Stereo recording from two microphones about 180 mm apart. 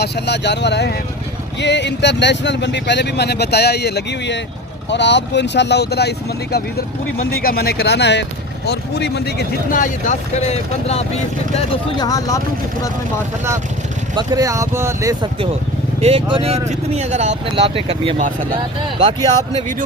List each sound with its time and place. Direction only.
0.0 s speech: 70° left (ahead or behind)
4.9 s speech: 75° left (ahead or behind); by 12.0 s 35° left (ahead or behind)
12.0 s speech: 20° left (ahead or behind)
14.2 s speech: 20° right (ahead or behind)
16.0 s speech: 35° right (ahead or behind)